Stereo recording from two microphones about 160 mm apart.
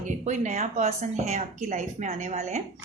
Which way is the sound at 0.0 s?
50° right (ahead or behind).